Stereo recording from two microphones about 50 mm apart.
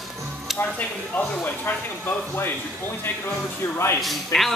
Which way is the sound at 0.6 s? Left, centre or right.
Left.